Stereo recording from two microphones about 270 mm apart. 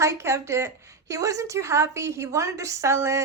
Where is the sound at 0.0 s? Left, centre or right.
Centre.